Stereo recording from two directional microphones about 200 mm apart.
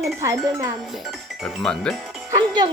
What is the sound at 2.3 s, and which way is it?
Speech, 20° right (ahead or behind).